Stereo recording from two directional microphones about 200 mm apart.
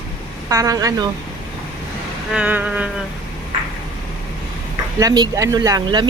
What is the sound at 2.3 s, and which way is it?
Speech, 5° right (ahead or behind).